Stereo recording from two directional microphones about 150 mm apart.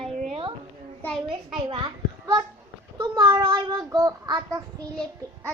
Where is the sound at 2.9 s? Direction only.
30° right (ahead or behind).